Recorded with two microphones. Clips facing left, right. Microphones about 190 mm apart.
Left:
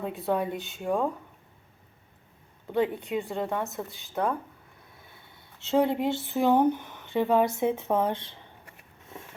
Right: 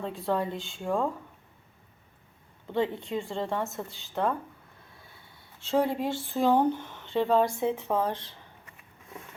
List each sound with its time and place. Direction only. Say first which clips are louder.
0.0 s speech: left 1 dB; 10° left (ahead or behind)
2.6 s speech: left 2 dB; 15° left (ahead or behind)
3.3 s a woman's voice: left 1 dB; 5° left (ahead or behind)
5.5 s speech: left 2 dB; 20° left (ahead or behind)